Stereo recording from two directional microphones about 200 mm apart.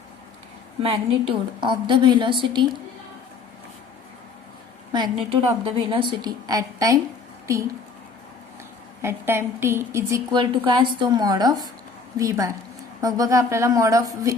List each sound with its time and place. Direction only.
0.8 s a woman's voice: 25° right (ahead or behind)
4.9 s a woman's voice: 20° right (ahead or behind)
9.0 s a woman's voice: 10° right (ahead or behind)